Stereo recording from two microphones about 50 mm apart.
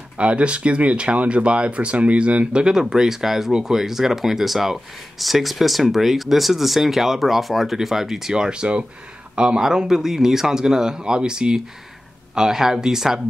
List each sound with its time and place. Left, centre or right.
0.2 s speech: right; by 13.2 s centre